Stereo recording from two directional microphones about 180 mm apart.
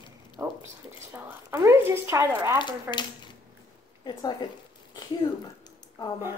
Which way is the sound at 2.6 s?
25° left (ahead or behind).